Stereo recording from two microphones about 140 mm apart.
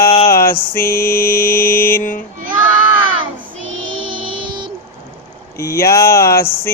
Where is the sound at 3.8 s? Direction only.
35° right (ahead or behind).